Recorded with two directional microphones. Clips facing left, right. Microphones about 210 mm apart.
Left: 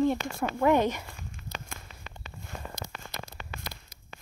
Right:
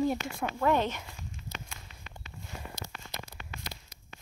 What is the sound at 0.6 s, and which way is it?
Speech, 15° left (ahead or behind).